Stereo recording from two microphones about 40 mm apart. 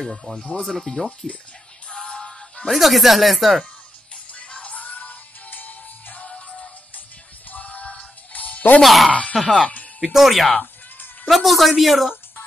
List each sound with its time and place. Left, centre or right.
0.0 s speech: centre
1.9 s music: left
2.7 s speech: centre
4.3 s music: left
6.2 s music: left
7.5 s music: left
8.8 s speech: centre